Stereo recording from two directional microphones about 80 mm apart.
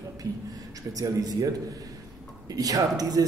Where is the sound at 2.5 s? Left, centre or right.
Right.